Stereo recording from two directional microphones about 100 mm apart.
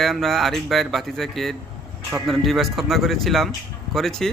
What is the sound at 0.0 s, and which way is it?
Speech, centre (ahead or behind).